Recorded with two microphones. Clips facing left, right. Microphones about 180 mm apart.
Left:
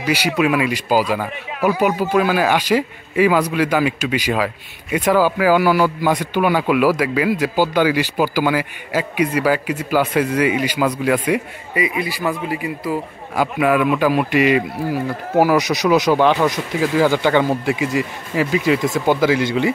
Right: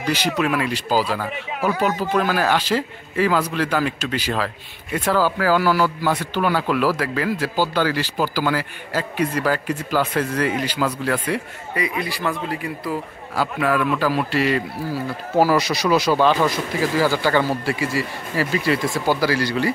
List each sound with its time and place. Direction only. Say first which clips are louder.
0.0 s a man's voice: left 3 dB; 10° left (ahead or behind)